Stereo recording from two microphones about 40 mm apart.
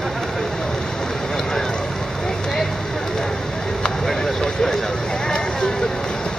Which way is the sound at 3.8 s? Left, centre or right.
Centre.